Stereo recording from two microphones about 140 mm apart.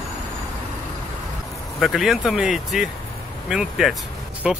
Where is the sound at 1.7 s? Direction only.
Centre (ahead or behind).